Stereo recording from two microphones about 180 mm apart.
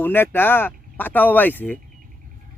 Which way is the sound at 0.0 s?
10° left (ahead or behind).